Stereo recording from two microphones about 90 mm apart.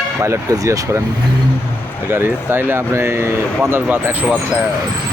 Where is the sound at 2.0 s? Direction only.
25° right (ahead or behind).